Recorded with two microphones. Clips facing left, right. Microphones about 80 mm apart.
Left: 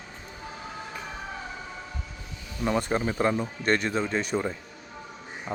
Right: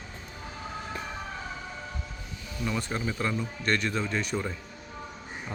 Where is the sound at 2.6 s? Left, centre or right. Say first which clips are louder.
Left 6 dB; left.